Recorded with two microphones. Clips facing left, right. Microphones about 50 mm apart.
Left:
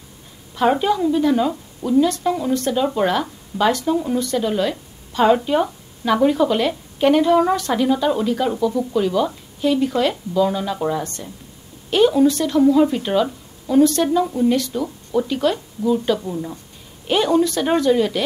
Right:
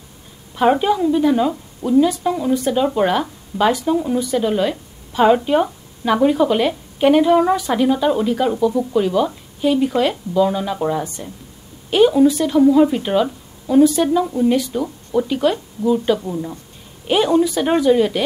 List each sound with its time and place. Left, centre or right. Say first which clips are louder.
0.6 s a woman's voice: right 2 dB; centre